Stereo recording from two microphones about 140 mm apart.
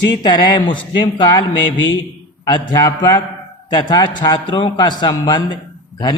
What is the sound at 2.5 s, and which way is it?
A man's voice, 30° left (ahead or behind).